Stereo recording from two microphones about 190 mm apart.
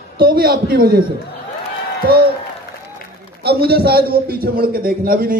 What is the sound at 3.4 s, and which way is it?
A man's voice, 55° right (ahead or behind).